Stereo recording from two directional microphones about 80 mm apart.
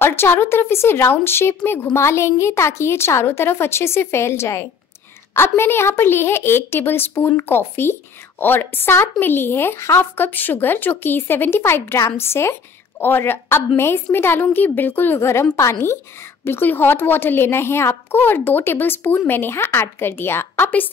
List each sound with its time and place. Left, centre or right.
0.0 s a woman's voice: left